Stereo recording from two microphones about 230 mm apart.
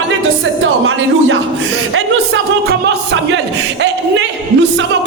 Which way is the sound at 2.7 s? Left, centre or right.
Right.